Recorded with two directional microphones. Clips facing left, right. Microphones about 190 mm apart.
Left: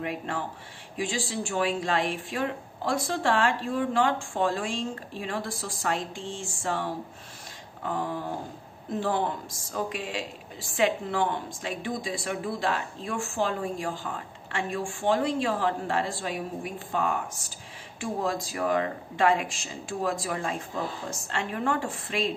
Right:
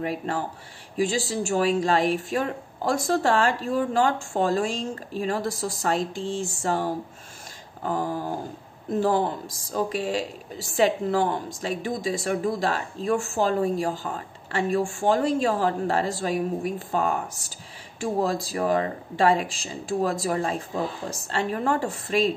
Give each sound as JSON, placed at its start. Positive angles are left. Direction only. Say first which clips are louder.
{"t": 0.0, "sound": "a woman's voice", "louder": "right 4 dB", "side_deg": -40}